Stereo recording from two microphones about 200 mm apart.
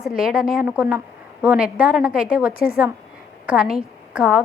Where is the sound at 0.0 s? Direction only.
5° right (ahead or behind).